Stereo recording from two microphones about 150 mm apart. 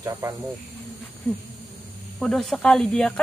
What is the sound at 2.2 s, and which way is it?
Speech, centre (ahead or behind).